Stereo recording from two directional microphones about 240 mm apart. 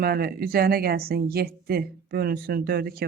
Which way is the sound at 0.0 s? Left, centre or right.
Right.